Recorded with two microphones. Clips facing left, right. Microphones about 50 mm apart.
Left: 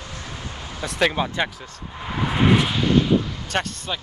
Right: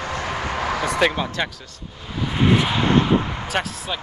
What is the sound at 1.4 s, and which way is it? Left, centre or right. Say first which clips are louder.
Speech: left 1 dB; centre.